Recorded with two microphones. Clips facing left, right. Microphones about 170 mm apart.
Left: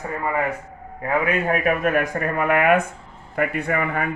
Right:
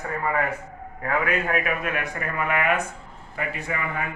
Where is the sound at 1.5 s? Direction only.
45° left (ahead or behind).